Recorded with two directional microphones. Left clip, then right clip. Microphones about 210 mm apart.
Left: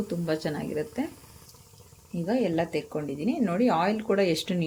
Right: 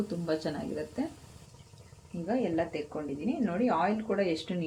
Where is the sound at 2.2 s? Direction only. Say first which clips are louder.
Left 4 dB; 50° left (ahead or behind).